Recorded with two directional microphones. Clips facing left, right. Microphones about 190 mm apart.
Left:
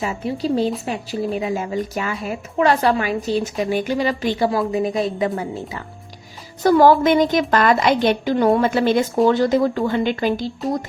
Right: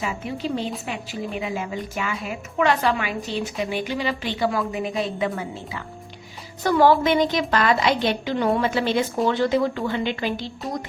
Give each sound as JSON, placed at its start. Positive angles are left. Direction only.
{"t": 0.0, "sound": "a woman's voice", "side_deg": 35}